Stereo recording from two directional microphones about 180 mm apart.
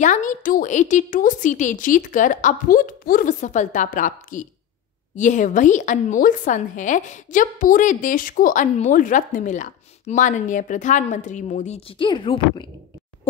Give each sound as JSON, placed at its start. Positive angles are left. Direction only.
{"t": 0.0, "sound": "a woman's voice", "side_deg": 45}
{"t": 12.0, "sound": "speech", "side_deg": 25}